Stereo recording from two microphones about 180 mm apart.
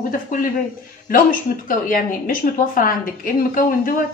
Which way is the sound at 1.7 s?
50° left (ahead or behind).